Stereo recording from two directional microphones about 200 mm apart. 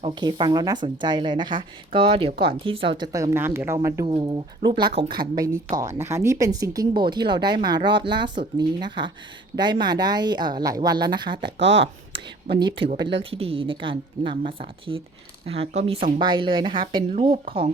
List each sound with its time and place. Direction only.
0.0 s a woman's voice: 25° right (ahead or behind)
4.0 s speech: 25° right (ahead or behind)
11.6 s speech: 65° right (ahead or behind)
12.5 s speech: 25° right (ahead or behind)